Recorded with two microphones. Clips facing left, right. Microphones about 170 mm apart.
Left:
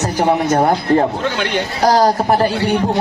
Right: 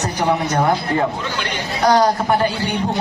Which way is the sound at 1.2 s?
65° left (ahead or behind).